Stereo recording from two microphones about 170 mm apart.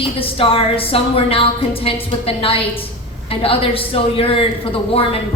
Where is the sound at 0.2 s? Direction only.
30° left (ahead or behind).